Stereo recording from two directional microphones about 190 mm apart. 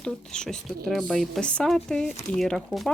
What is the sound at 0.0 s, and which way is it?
Speech, 5° left (ahead or behind).